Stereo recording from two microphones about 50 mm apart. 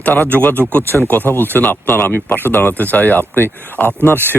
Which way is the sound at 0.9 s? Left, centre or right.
Right.